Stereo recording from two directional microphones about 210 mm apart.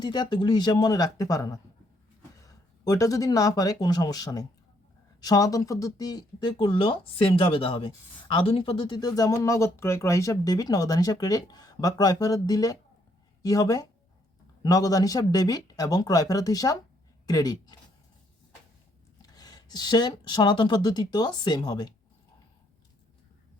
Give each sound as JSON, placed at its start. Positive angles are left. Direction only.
{"t": 0.0, "sound": "speech", "side_deg": 20}
{"t": 19.2, "sound": "speech", "side_deg": 20}